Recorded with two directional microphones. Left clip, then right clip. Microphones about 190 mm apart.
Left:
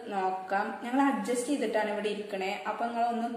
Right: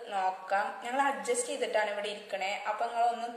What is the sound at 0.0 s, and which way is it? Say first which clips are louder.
A woman's voice: left 1 dB; 10° right (ahead or behind).